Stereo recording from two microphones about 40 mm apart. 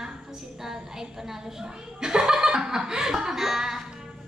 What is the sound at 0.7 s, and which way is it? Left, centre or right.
A woman's voice, centre.